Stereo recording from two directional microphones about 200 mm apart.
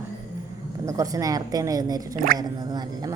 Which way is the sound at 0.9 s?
15° right (ahead or behind).